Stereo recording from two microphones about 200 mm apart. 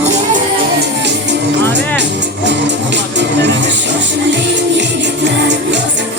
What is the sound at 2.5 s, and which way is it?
Music, 60° right (ahead or behind).